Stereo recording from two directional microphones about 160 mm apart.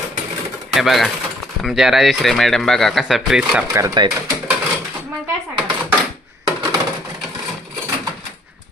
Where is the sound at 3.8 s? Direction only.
25° right (ahead or behind).